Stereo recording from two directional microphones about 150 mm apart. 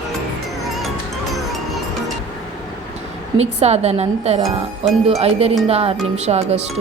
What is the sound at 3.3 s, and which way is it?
Speech, 45° right (ahead or behind).